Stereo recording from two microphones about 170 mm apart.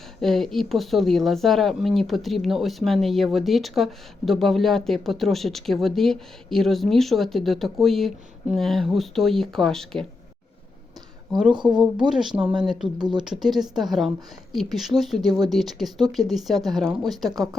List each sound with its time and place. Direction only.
0.2 s speech: centre (ahead or behind)
11.3 s speech: 5° right (ahead or behind)
11.5 s speech: 25° right (ahead or behind)
11.8 s speech: 5° right (ahead or behind)
13.0 s speech: 25° right (ahead or behind)
13.2 s speech: centre (ahead or behind)